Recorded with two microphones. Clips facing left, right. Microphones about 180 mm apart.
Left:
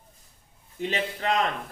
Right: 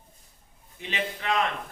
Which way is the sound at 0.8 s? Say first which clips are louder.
Left 4 dB; 40° left (ahead or behind).